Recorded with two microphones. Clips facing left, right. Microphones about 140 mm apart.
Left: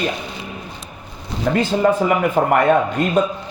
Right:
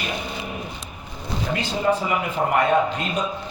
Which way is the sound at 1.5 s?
65° left (ahead or behind).